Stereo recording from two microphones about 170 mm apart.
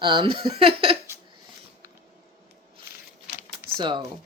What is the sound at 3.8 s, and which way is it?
Speech, 25° right (ahead or behind).